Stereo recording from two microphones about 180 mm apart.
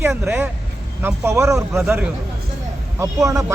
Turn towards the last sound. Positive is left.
turn(degrees=-15)  # may be behind; listen again after turning